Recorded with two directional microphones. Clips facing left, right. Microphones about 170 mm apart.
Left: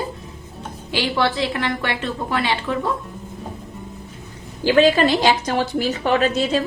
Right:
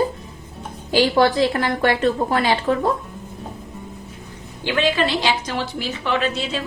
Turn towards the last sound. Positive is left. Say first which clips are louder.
# left 4 dB
turn(degrees=40)  # may be behind; listen again after turning